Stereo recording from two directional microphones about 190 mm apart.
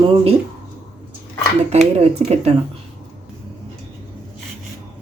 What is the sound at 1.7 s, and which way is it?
Speech, 35° right (ahead or behind).